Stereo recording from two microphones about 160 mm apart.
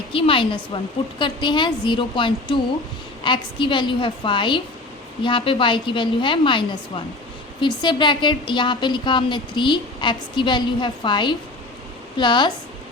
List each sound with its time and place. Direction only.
0.1 s a woman's voice: 35° left (ahead or behind)